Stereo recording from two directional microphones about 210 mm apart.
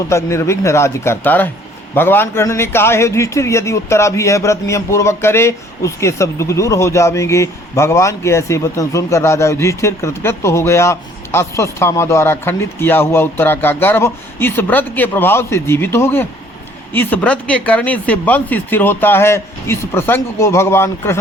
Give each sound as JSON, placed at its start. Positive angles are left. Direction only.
{"t": 0.1, "sound": "a man's voice", "side_deg": 15}